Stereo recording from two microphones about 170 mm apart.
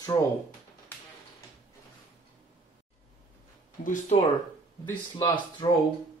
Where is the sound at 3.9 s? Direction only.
40° left (ahead or behind).